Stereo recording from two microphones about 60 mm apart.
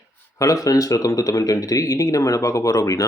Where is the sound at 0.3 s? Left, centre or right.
Left.